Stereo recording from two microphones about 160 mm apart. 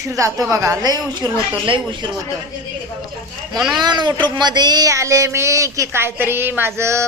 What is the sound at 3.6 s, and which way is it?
Speech, centre (ahead or behind).